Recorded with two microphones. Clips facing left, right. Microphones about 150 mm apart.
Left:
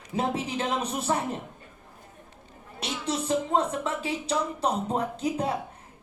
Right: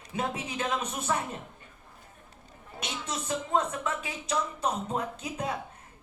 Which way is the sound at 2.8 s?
30° left (ahead or behind).